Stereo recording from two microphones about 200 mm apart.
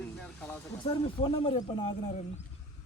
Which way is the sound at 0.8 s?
20° left (ahead or behind).